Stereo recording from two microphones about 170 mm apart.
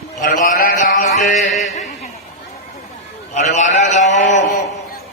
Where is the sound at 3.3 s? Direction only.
45° left (ahead or behind).